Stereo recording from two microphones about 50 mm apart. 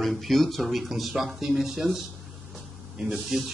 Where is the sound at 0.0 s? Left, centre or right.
Centre.